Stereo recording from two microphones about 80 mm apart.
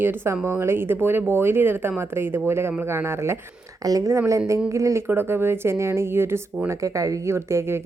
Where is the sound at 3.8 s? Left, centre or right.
Right.